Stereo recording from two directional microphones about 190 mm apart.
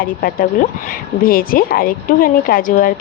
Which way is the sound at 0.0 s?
50° left (ahead or behind).